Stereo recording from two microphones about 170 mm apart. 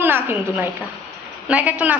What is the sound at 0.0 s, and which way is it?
A woman's voice, 15° right (ahead or behind).